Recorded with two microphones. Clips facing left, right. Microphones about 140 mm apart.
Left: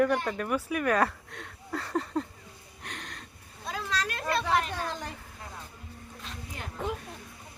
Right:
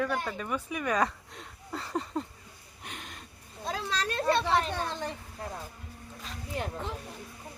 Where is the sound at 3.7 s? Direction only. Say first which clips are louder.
Right 1 dB; 30° right (ahead or behind).